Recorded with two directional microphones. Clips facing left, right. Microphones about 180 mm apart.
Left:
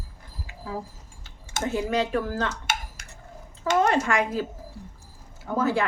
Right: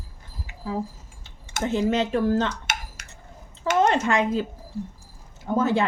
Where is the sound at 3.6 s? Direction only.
20° right (ahead or behind).